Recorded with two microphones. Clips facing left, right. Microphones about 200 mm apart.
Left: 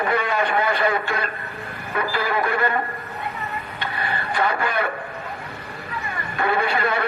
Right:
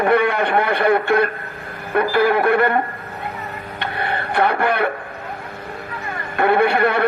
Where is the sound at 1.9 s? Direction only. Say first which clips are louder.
Right 8 dB; 55° right (ahead or behind).